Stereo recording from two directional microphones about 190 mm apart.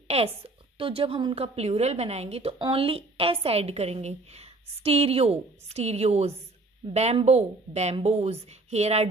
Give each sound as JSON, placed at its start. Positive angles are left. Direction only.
{"t": 0.1, "sound": "a woman's voice", "side_deg": -35}